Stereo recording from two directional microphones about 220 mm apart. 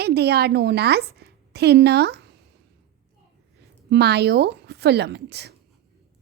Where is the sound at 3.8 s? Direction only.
50° right (ahead or behind).